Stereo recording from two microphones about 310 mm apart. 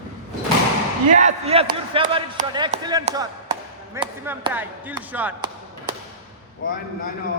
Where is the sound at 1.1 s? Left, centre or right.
Right.